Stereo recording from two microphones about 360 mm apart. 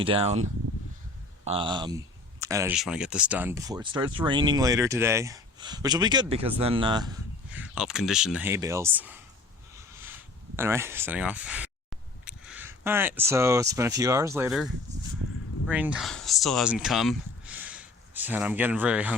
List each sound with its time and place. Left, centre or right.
0.0 s speech: centre
1.5 s speech: centre
10.6 s speech: centre